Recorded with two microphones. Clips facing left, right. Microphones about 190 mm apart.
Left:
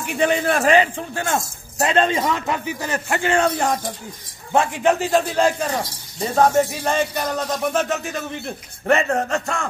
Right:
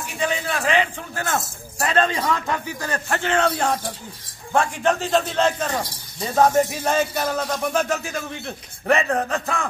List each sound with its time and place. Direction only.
0.0 s a man's voice: 60° left (ahead or behind); by 1.0 s 40° left (ahead or behind)
1.1 s speech: 25° left (ahead or behind); by 3.7 s 10° left (ahead or behind)
4.5 s speech: 20° left (ahead or behind)
6.3 s speech: 5° right (ahead or behind)